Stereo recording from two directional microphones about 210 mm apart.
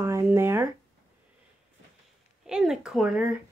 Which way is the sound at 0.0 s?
15° right (ahead or behind).